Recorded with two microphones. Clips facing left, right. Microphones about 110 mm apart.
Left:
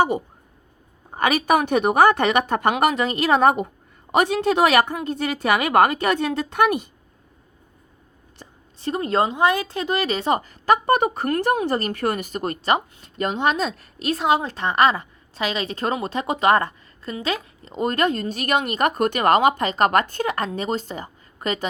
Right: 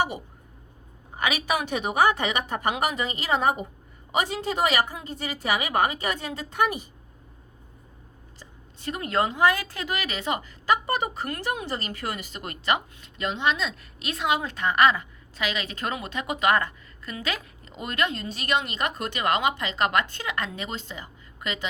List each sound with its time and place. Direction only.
1.1 s a woman's voice: 50° left (ahead or behind); by 6.8 s 65° left (ahead or behind)
8.8 s speech: 30° left (ahead or behind)
10.7 s speech: 55° left (ahead or behind)
12.4 s a woman's voice: 35° left (ahead or behind)